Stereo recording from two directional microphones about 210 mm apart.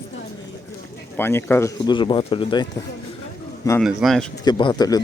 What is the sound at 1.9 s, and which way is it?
Speech, 20° left (ahead or behind).